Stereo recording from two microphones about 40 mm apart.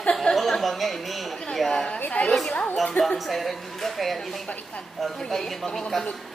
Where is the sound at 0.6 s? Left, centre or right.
Centre.